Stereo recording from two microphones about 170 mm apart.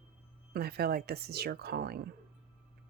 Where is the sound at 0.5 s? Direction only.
70° right (ahead or behind).